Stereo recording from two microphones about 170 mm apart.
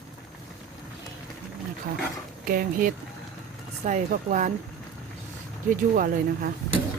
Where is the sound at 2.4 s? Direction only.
55° right (ahead or behind).